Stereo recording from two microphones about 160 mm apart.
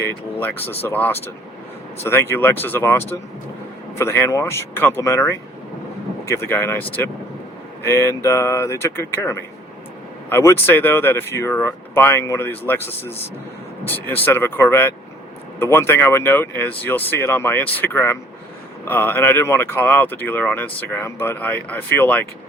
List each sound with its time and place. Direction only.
0.0 s speech: 10° left (ahead or behind)
7.9 s speech: 15° left (ahead or behind)